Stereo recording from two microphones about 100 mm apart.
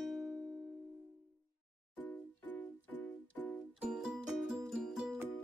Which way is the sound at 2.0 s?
15° left (ahead or behind).